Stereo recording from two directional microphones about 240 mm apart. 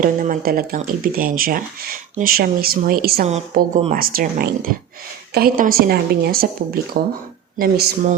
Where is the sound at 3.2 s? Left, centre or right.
Right.